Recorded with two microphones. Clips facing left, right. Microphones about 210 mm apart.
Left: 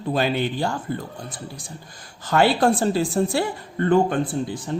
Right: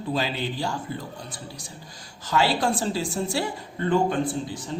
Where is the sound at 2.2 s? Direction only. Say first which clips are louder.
Left 5 dB; 55° left (ahead or behind).